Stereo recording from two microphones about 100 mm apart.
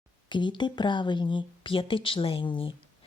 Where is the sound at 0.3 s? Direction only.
50° left (ahead or behind).